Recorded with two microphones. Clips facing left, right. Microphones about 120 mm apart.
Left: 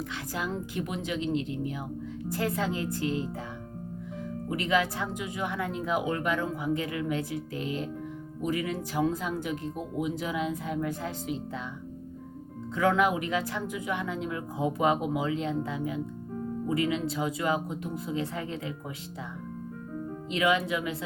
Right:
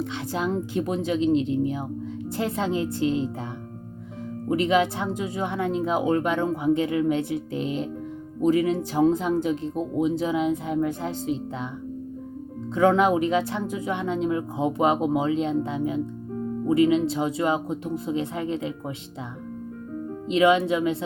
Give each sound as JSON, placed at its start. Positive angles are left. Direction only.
{"t": 0.0, "sound": "speech", "side_deg": -25}
{"t": 4.4, "sound": "speech", "side_deg": -25}
{"t": 12.7, "sound": "speech", "side_deg": -30}
{"t": 20.2, "sound": "speech", "side_deg": -25}